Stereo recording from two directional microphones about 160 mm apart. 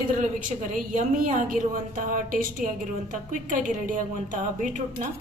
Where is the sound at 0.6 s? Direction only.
55° right (ahead or behind).